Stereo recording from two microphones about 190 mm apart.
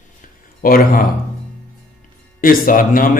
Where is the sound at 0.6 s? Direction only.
50° left (ahead or behind).